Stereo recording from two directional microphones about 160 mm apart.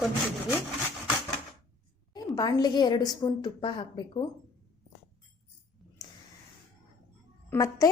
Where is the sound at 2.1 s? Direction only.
25° left (ahead or behind).